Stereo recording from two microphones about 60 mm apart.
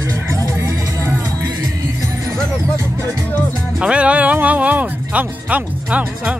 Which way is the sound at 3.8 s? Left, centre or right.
Centre.